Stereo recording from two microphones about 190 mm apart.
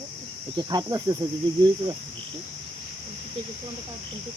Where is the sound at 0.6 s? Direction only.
20° right (ahead or behind).